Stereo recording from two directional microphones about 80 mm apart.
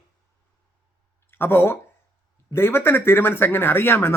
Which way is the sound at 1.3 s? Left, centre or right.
Left.